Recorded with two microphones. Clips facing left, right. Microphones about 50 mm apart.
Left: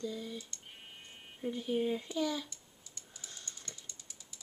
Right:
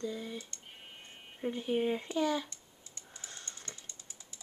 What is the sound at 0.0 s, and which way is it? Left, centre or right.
Speech, right.